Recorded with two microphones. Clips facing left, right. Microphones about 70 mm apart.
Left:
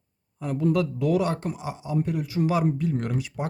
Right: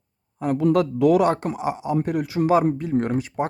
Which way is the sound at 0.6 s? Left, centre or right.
Right.